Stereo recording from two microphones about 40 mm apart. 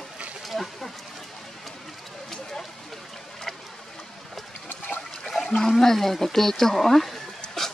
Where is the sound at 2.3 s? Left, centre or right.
Centre.